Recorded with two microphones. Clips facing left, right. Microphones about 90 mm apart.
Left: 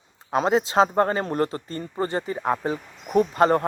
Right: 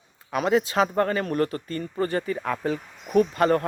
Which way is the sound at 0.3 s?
30° left (ahead or behind).